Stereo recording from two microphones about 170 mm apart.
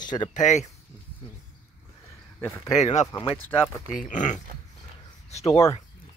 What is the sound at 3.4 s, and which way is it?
Speech, 15° left (ahead or behind).